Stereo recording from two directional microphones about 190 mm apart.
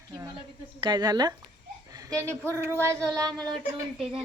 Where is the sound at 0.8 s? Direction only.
25° right (ahead or behind).